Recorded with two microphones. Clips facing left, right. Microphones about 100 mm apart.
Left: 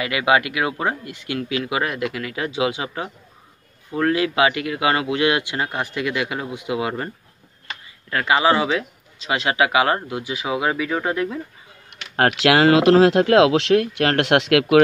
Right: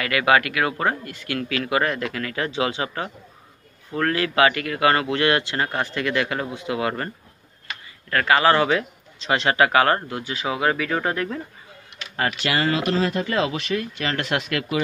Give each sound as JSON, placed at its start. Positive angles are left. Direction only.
{"t": 0.0, "sound": "speech", "side_deg": 15}
{"t": 8.1, "sound": "speech", "side_deg": 15}
{"t": 12.2, "sound": "speech", "side_deg": 80}